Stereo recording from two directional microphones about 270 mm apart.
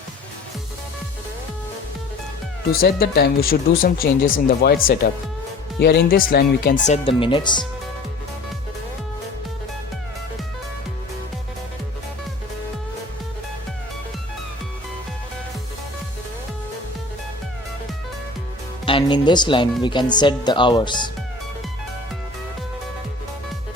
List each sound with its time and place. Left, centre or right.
2.7 s speech: left; by 7.7 s centre
18.9 s music: centre
19.8 s speech: centre